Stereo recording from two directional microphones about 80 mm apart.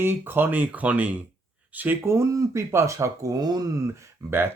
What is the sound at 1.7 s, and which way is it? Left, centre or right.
Speech, right.